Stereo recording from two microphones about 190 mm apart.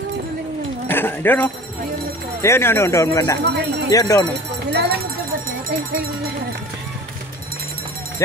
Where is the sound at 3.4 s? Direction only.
60° right (ahead or behind).